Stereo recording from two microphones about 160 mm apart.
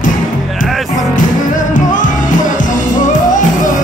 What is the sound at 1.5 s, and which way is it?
Music, 55° left (ahead or behind).